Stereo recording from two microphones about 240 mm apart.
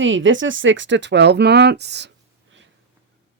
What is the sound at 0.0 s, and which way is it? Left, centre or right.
Speech, right.